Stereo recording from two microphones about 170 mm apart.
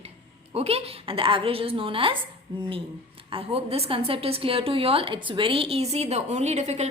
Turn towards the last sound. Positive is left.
turn(degrees=-40)  # may be behind; listen again after turning